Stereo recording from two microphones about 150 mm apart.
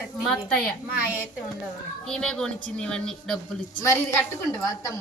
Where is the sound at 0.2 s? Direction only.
Centre (ahead or behind).